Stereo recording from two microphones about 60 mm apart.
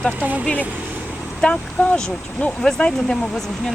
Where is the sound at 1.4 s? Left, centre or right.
Centre.